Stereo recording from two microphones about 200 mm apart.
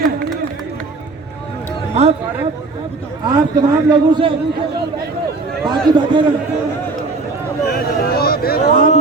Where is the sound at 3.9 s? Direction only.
25° right (ahead or behind).